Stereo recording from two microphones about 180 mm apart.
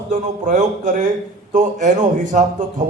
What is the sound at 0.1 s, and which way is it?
Speech, 45° right (ahead or behind).